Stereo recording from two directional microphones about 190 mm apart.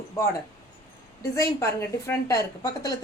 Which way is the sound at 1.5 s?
15° left (ahead or behind).